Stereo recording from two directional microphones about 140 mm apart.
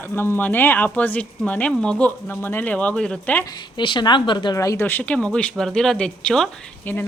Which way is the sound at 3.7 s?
35° left (ahead or behind).